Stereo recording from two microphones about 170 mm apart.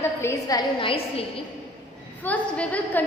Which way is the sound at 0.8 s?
35° left (ahead or behind).